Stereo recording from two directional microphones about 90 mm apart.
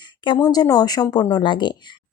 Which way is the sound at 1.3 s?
60° left (ahead or behind).